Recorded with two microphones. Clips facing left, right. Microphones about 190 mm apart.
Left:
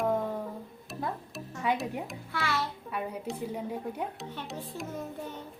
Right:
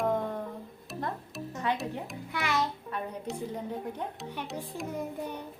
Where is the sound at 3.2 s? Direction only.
5° left (ahead or behind).